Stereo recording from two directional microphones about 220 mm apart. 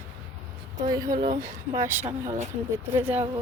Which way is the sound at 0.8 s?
15° right (ahead or behind).